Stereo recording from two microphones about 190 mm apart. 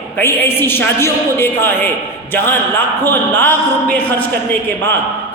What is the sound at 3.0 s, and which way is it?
A man's voice, 10° left (ahead or behind).